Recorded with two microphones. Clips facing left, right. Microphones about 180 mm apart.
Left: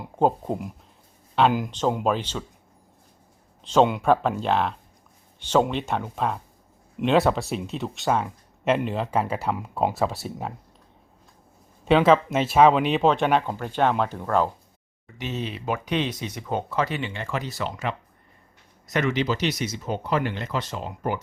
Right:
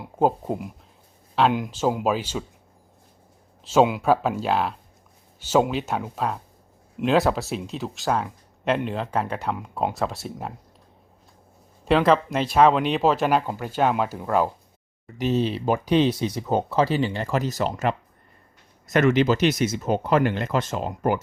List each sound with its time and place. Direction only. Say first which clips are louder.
0.0 s speech: even; 5° right (ahead or behind)
3.6 s speech: right 1 dB; 5° right (ahead or behind)
11.9 s speech: left 1 dB; centre (ahead or behind)
15.0 s speech: right 8 dB; 35° right (ahead or behind)